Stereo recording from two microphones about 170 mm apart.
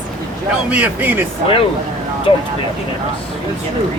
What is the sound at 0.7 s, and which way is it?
Speech, 10° right (ahead or behind).